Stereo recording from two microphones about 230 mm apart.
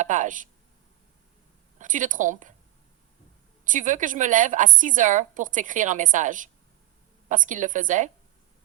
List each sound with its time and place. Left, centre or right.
0.0 s a woman's voice: right
1.8 s a woman's voice: right
3.6 s a woman's voice: right